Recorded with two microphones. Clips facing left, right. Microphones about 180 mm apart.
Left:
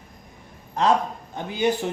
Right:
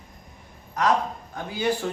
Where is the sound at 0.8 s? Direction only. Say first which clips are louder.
Left 2 dB; 25° left (ahead or behind).